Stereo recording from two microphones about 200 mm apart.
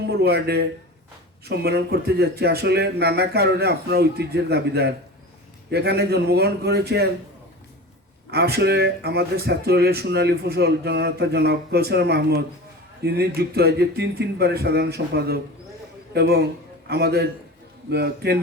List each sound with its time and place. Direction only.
0.0 s speech: 55° right (ahead or behind)
8.3 s a man's voice: 55° right (ahead or behind)